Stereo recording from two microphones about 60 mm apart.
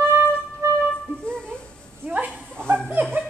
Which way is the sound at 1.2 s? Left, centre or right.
Centre.